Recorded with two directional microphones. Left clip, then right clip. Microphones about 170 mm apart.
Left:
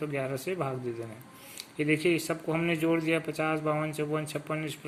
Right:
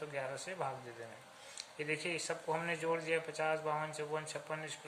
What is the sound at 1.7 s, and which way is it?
A man's voice, 20° left (ahead or behind).